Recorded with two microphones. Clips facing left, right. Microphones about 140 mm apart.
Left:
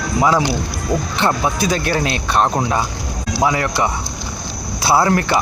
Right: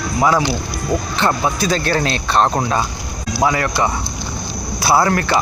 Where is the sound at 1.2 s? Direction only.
20° left (ahead or behind).